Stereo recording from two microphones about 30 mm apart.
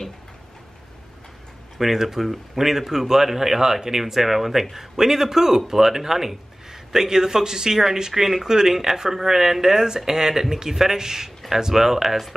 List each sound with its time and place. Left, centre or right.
1.8 s speech: centre